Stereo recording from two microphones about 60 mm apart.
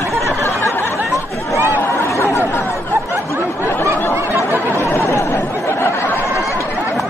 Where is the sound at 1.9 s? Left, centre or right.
Left.